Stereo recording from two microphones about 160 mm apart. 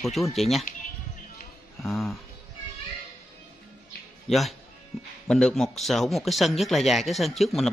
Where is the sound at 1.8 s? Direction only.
Centre (ahead or behind).